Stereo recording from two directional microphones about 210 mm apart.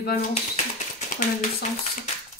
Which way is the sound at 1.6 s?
35° left (ahead or behind).